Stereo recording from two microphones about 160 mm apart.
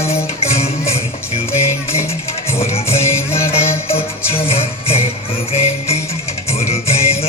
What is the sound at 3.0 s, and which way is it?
Music, 15° left (ahead or behind).